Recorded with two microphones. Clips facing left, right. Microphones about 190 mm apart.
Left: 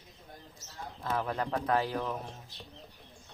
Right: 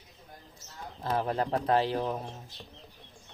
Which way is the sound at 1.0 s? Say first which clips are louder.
Right 3 dB; 35° right (ahead or behind).